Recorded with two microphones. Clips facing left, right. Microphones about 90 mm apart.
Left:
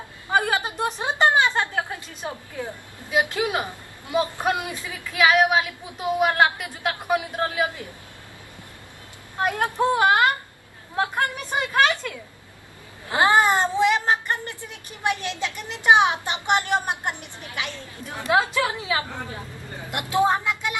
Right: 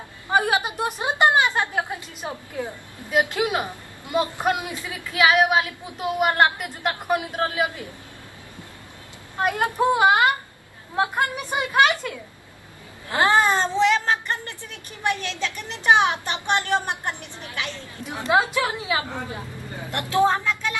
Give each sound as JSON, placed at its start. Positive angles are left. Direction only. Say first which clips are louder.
{"t": 0.3, "sound": "a woman's voice", "louder": "right 1 dB", "side_deg": -15}
{"t": 4.4, "sound": "a woman's voice", "louder": "right 1 dB", "side_deg": -15}
{"t": 9.4, "sound": "a woman's voice", "louder": "right 1 dB", "side_deg": -10}
{"t": 13.1, "sound": "speech", "louder": "left 1 dB", "side_deg": 20}
{"t": 18.0, "sound": "a woman's voice", "louder": "right 1 dB", "side_deg": -15}
{"t": 19.9, "sound": "speech", "louder": "right 1 dB", "side_deg": 15}